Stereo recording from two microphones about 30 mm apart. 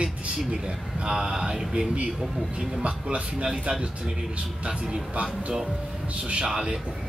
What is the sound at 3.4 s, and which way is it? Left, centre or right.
Speech, right.